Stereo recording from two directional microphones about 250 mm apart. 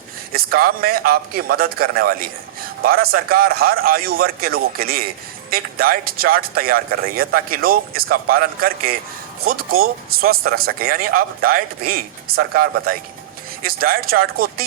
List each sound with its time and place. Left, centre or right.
0.3 s speech: right